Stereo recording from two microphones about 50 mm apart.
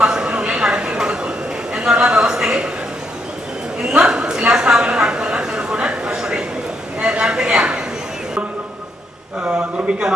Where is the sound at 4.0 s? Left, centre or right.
Centre.